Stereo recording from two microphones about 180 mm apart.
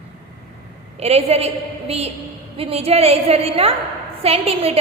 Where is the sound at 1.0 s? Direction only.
35° right (ahead or behind).